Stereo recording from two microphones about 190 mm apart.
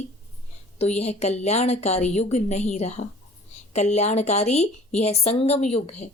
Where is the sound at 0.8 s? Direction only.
35° left (ahead or behind).